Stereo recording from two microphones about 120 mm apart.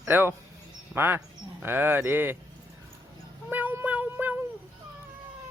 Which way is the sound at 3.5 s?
15° right (ahead or behind).